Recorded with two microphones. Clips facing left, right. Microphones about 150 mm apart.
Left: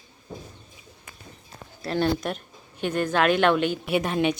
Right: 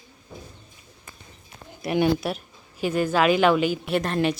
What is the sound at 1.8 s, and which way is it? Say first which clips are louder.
Speech: right 3 dB; 15° right (ahead or behind).